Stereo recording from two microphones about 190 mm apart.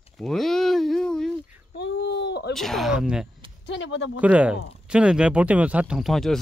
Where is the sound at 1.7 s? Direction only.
65° left (ahead or behind).